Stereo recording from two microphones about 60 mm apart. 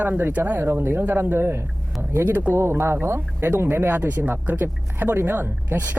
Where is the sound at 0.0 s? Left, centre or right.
Right.